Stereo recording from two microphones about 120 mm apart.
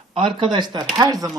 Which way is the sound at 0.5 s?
40° right (ahead or behind).